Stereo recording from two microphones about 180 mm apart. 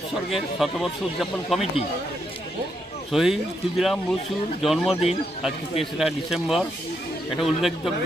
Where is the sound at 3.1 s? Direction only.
Centre (ahead or behind).